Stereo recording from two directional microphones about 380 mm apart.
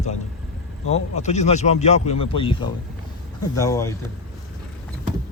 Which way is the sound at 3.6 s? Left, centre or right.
Centre.